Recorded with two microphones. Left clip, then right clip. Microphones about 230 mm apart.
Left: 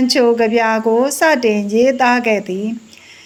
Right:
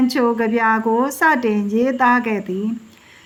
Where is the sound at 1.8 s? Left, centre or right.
Right.